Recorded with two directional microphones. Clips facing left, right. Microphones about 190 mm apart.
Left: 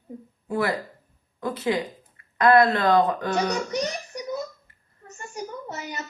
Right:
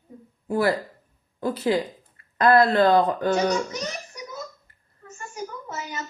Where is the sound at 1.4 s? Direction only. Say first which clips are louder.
Right 2 dB; 30° right (ahead or behind).